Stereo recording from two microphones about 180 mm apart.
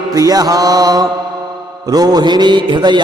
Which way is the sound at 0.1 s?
20° right (ahead or behind).